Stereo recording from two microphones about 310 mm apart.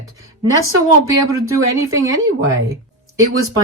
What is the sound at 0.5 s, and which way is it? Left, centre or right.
A woman's voice, right.